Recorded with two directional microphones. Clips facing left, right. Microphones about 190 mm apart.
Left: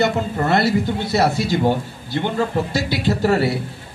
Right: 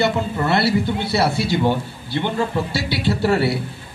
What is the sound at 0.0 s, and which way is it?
A man's voice, 45° left (ahead or behind).